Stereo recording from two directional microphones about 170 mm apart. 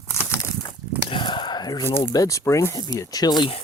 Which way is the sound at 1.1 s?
30° left (ahead or behind).